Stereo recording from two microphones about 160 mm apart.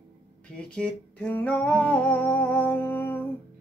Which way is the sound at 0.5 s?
5° left (ahead or behind).